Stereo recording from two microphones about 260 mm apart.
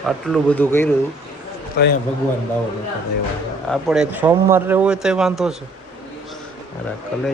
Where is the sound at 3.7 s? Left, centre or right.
Centre.